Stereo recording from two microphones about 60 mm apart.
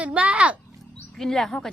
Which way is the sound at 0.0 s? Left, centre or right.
Right.